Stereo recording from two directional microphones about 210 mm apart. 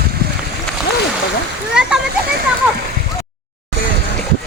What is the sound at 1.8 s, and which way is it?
Speech, 5° right (ahead or behind).